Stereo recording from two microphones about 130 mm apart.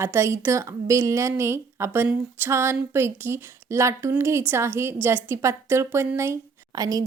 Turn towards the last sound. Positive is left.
turn(degrees=-30)  # may be behind; listen again after turning